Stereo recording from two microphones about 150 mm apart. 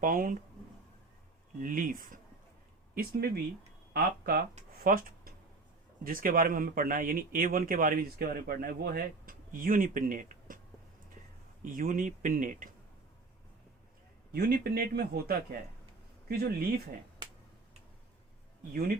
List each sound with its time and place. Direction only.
0.0 s speech: 70° right (ahead or behind)
1.6 s speech: 65° right (ahead or behind)
2.9 s a man's voice: 85° right; by 10.6 s 60° right (ahead or behind)
11.6 s speech: 65° right (ahead or behind)
14.3 s a man's voice: 90° right